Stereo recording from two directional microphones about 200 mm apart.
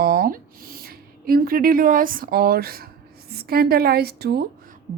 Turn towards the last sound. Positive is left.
turn(degrees=-55)  # may be behind; listen again after turning